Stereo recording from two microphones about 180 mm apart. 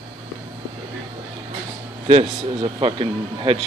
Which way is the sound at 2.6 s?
30° right (ahead or behind).